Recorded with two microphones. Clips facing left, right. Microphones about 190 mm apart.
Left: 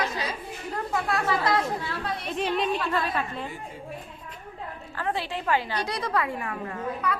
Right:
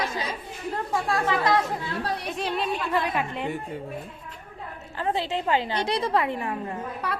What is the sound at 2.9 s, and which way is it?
Speech, 15° right (ahead or behind).